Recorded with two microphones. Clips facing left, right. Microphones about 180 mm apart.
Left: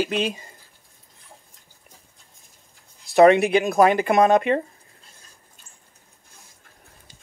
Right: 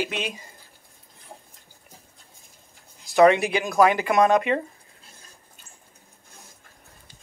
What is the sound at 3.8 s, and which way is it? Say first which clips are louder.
Speech: left 1 dB; 40° left (ahead or behind).